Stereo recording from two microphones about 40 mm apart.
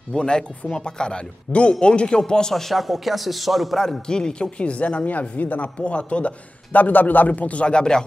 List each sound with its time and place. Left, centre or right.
0.1 s speech: centre
2.5 s speech: centre
4.1 s a man's voice: left
5.8 s speech: left
6.7 s a man's voice: left